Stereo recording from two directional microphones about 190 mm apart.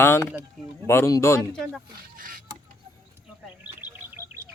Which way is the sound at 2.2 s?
45° right (ahead or behind).